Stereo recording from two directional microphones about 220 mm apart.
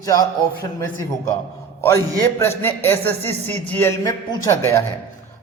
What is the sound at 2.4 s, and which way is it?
A man's voice, 10° left (ahead or behind).